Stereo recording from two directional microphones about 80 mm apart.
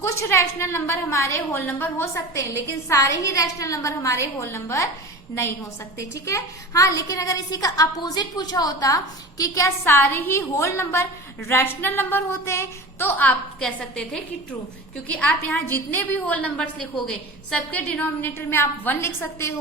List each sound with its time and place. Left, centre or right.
0.0 s a woman's voice: left
2.1 s a woman's voice: left
9.8 s a woman's voice: left
13.7 s a woman's voice: centre
15.2 s a woman's voice: centre
15.5 s a woman's voice: left
17.7 s a woman's voice: centre